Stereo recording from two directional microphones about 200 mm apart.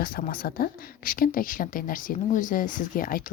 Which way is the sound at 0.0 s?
45° left (ahead or behind).